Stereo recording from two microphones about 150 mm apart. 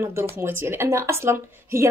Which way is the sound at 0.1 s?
15° right (ahead or behind).